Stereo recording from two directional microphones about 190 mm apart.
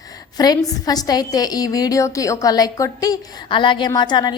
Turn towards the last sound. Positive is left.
turn(degrees=25)  # may be behind; listen again after turning